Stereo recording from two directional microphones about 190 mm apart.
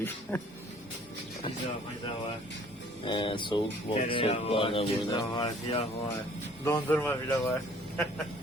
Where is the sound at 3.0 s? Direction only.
25° left (ahead or behind).